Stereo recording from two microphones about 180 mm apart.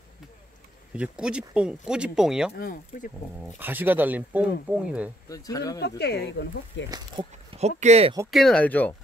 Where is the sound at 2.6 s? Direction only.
50° left (ahead or behind).